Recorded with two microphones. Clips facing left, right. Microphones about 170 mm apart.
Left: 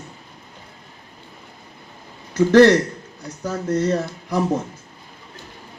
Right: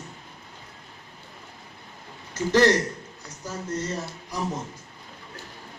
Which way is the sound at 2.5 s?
60° left (ahead or behind).